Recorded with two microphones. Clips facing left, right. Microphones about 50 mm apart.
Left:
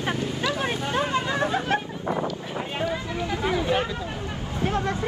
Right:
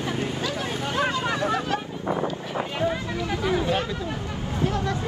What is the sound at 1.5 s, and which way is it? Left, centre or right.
Chatter, left.